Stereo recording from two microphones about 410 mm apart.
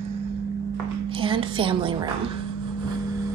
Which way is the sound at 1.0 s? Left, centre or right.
Centre.